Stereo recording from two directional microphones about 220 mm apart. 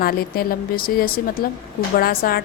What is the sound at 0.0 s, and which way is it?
A woman's voice, 40° left (ahead or behind).